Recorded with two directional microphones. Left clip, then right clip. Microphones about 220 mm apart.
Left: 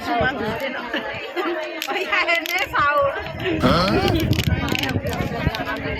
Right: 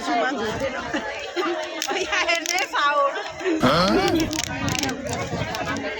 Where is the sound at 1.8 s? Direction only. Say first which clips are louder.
Left 2 dB; 20° left (ahead or behind).